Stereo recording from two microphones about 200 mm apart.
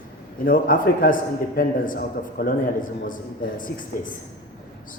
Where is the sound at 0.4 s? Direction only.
45° left (ahead or behind).